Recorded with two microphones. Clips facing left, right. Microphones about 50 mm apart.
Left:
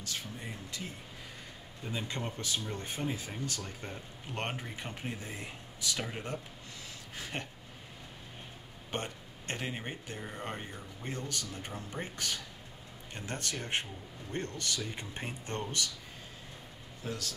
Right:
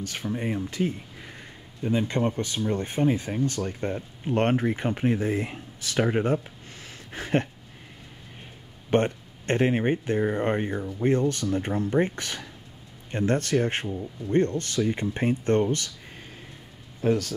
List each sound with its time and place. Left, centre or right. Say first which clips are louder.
0.0 s speech: right 12 dB; right
4.8 s speech: right 16 dB; right
6.1 s speech: right 15 dB; right
7.1 s a sound: right 15 dB; right
8.9 s speech: right 15 dB; right
17.0 s speech: right 16 dB; right